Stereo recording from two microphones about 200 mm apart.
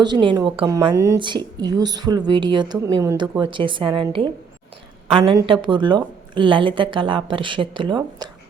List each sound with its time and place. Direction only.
0.0 s a woman's voice: 25° right (ahead or behind)